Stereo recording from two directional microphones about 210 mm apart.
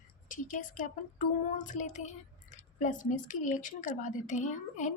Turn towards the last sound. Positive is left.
turn(degrees=35)  # may be behind; listen again after turning